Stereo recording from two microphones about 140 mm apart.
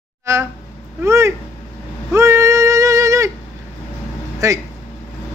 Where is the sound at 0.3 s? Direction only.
20° right (ahead or behind).